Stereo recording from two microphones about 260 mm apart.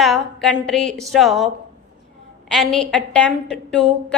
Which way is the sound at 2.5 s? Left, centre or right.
Centre.